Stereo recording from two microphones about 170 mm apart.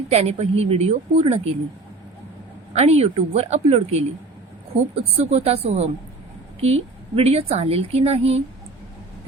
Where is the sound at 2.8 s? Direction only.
40° right (ahead or behind).